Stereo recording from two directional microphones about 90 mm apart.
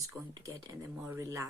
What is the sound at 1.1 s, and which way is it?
Speech, 35° right (ahead or behind).